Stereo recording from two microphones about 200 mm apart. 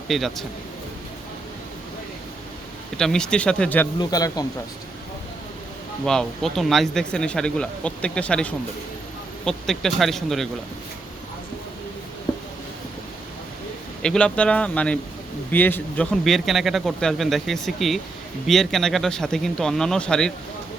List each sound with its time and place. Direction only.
0.1 s speech: centre (ahead or behind)
3.0 s speech: 5° left (ahead or behind)
4.0 s speech: 20° left (ahead or behind)
6.1 s speech: centre (ahead or behind)
14.0 s speech: 5° left (ahead or behind)